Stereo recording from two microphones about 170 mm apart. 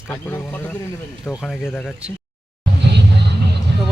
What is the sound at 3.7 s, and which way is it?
Music, 80° right.